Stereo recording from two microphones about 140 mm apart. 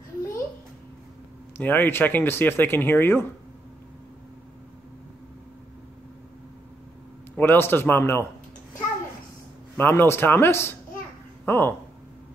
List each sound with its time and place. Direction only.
1.6 s speech: 15° left (ahead or behind)
7.3 s speech: 15° left (ahead or behind)
9.8 s speech: 15° left (ahead or behind)